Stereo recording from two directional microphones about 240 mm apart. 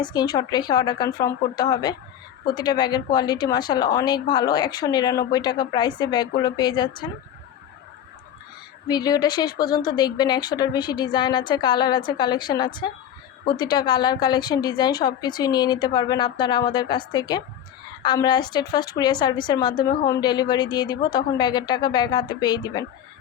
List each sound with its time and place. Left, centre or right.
0.0 s a woman's voice: centre
8.9 s a woman's voice: centre